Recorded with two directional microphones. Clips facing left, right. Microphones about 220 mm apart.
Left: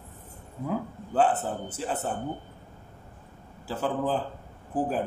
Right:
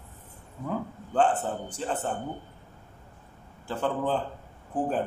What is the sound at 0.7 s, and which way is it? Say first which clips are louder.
A man's voice: left 1 dB; 5° left (ahead or behind).